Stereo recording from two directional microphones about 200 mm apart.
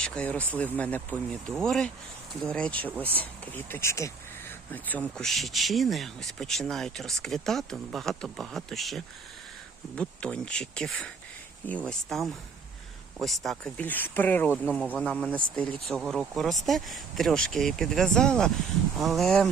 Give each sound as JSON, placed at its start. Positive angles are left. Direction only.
{"t": 0.0, "sound": "speech", "side_deg": 5}